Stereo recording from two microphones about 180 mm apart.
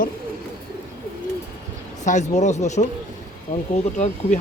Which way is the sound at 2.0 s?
40° left (ahead or behind).